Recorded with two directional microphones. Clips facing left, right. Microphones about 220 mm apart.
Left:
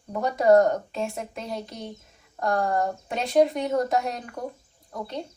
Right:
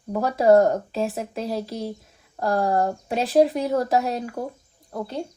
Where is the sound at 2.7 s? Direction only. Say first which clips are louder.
Right 4 dB; 35° right (ahead or behind).